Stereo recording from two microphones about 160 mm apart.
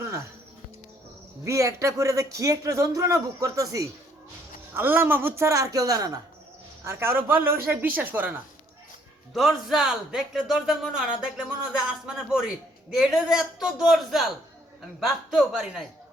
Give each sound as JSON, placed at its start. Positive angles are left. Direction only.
{"t": 0.0, "sound": "music", "side_deg": -15}
{"t": 1.5, "sound": "speech", "side_deg": -20}